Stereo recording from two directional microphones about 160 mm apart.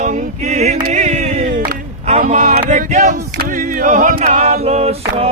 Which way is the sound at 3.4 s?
60° right (ahead or behind).